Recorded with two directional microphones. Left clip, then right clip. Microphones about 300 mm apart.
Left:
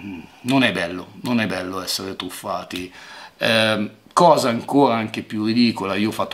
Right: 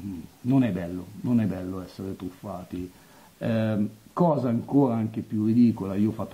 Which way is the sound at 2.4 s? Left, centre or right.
Centre.